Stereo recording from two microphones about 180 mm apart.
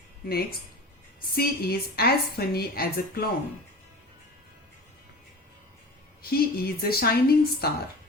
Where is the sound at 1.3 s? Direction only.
60° left (ahead or behind).